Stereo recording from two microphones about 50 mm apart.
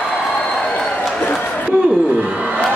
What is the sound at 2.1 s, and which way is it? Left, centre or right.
Crowd, right.